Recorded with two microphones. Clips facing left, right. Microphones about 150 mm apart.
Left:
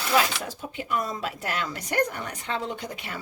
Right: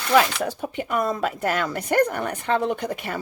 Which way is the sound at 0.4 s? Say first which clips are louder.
Right 7 dB; 60° right (ahead or behind).